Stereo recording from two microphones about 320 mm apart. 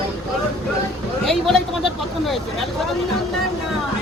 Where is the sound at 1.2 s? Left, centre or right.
Centre.